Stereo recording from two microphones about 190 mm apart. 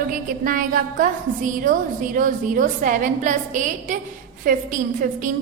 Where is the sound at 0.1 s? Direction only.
45° right (ahead or behind).